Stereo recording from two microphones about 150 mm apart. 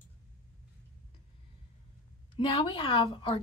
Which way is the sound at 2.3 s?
35° left (ahead or behind).